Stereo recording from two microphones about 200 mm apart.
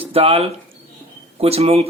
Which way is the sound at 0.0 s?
30° right (ahead or behind).